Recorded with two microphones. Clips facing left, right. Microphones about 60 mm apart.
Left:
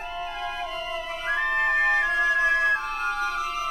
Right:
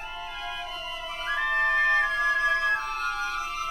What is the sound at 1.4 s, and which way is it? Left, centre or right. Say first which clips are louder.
Music: even; left.